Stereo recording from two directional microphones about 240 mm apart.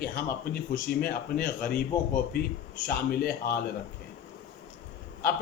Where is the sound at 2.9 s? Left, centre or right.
Left.